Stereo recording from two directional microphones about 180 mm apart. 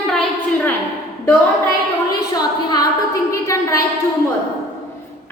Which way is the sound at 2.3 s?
20° left (ahead or behind).